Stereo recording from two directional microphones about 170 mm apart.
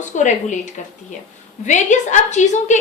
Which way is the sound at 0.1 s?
45° left (ahead or behind).